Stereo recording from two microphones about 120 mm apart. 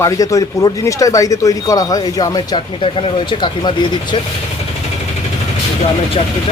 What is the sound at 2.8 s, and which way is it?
Speech, 45° left (ahead or behind).